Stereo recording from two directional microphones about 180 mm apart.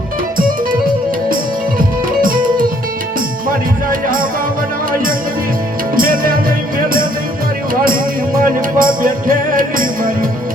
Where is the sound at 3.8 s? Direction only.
50° right (ahead or behind).